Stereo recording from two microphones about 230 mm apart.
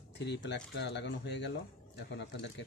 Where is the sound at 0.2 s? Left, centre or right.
Left.